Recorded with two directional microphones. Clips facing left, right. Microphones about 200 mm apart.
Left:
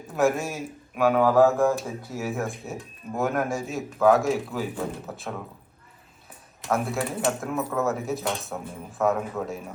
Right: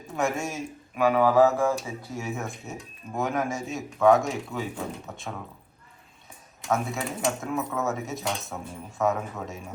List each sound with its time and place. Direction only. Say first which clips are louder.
0.2 s speech: left 4 dB; centre (ahead or behind)
6.7 s speech: left 2 dB; centre (ahead or behind)